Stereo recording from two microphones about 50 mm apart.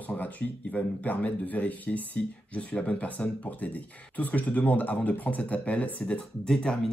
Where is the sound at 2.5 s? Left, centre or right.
Left.